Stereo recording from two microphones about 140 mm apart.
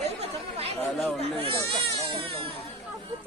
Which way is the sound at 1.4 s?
40° right (ahead or behind).